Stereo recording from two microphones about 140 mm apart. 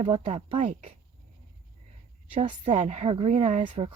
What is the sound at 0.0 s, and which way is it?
Speech, 45° right (ahead or behind).